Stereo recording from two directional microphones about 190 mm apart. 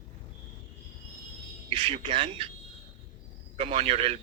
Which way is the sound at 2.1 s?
25° right (ahead or behind).